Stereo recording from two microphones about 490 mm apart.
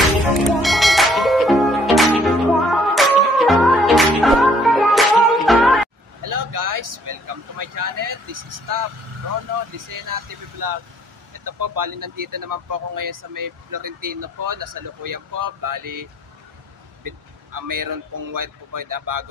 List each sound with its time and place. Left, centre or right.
0.4 s music: centre
6.2 s vehicle: right
9.8 s a sound: right
10.6 s speech: right